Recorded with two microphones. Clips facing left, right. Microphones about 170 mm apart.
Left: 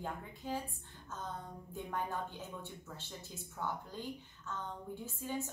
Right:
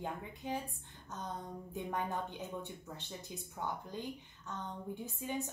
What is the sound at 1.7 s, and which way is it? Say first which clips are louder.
A woman's voice: right 1 dB; 15° right (ahead or behind).